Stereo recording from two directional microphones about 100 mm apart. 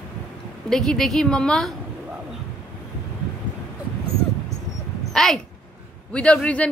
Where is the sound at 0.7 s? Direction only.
5° left (ahead or behind).